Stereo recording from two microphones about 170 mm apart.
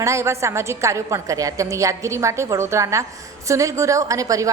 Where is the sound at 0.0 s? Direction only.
15° right (ahead or behind).